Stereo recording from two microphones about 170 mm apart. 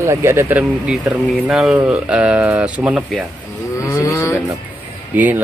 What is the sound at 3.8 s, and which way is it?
Moo, 20° left (ahead or behind).